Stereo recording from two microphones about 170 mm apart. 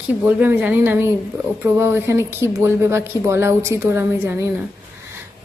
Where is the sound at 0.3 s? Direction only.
10° right (ahead or behind).